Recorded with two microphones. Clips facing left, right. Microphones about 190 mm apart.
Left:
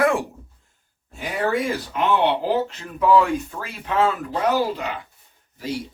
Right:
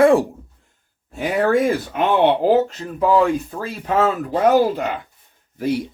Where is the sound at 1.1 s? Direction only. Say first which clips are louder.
Right 6 dB; 60° right (ahead or behind).